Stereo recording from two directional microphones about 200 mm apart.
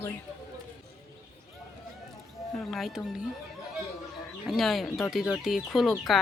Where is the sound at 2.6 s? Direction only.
Centre (ahead or behind).